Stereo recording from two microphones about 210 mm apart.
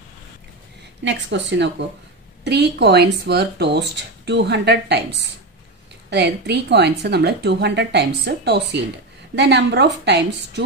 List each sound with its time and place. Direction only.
1.0 s a woman's voice: 60° right (ahead or behind)